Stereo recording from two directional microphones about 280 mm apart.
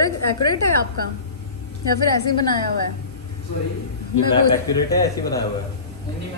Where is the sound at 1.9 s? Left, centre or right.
Left.